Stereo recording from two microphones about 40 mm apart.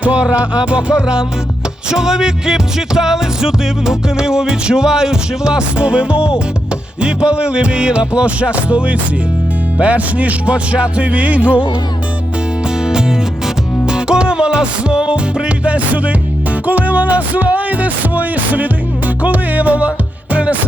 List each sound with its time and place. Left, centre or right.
0.0 s music: right
12.8 s music: centre; by 20.6 s right